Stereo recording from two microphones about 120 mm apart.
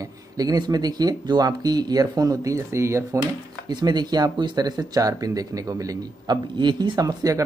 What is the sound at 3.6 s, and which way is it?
Speech, 35° right (ahead or behind).